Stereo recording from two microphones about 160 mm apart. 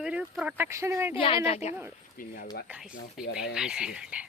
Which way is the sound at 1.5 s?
40° left (ahead or behind).